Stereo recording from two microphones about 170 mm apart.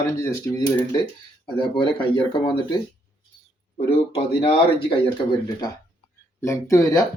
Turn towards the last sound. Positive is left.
turn(degrees=20)  # may be behind; listen again after turning